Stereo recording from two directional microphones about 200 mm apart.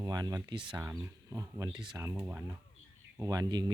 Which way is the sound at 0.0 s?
20° right (ahead or behind).